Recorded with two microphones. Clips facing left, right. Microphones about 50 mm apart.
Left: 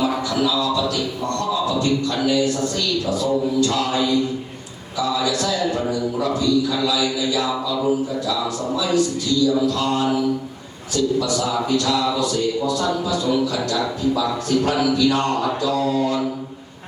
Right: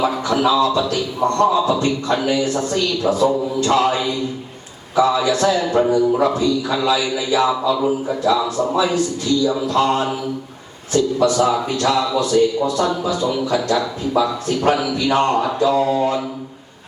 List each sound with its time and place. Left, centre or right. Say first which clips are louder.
0.0 s speech: right 3 dB; right
5.8 s a man's voice: right 7 dB; right
6.1 s speech: right 2 dB; right